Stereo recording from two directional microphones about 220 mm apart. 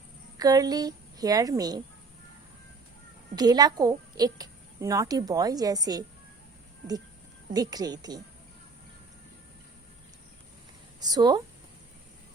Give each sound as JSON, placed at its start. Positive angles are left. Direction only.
{"t": 0.3, "sound": "a woman's voice", "side_deg": -15}
{"t": 3.3, "sound": "a woman's voice", "side_deg": -20}
{"t": 7.5, "sound": "a woman's voice", "side_deg": -15}
{"t": 11.0, "sound": "a woman's voice", "side_deg": -20}